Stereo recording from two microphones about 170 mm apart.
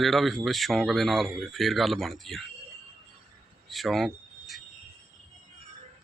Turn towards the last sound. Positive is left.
turn(degrees=0)  # may be behind; listen again after turning